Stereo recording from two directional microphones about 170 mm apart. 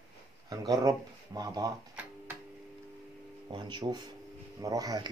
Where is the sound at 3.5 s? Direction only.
25° right (ahead or behind).